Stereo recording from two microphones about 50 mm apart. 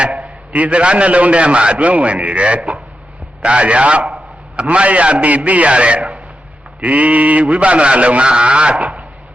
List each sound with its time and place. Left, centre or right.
0.0 s a man's voice: right